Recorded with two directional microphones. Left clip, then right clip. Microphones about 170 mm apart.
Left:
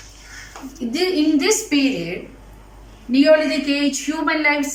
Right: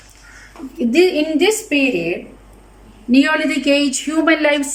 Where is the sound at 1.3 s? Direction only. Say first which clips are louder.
Right 2 dB; 50° right (ahead or behind).